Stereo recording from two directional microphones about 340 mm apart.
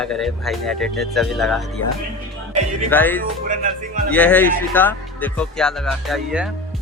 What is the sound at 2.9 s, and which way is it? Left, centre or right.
Speech, centre.